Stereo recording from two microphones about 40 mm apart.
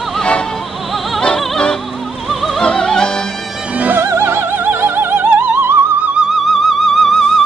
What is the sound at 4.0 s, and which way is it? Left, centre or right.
Opera, right.